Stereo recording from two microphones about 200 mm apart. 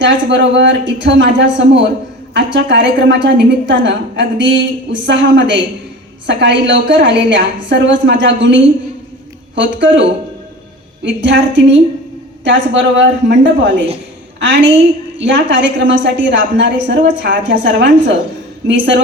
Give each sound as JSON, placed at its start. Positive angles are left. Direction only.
{"t": 0.0, "sound": "a woman's voice", "side_deg": -60}